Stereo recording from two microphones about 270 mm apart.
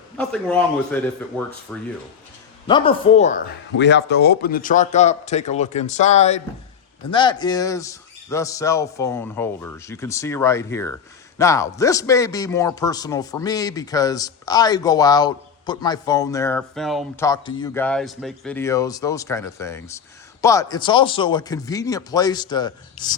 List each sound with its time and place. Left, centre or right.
0.2 s speech: centre
2.6 s a man's voice: centre
3.8 s a man's voice: left; by 17.2 s centre
17.2 s speech: centre